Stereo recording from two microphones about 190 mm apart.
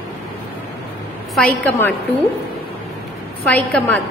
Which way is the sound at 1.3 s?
5° left (ahead or behind).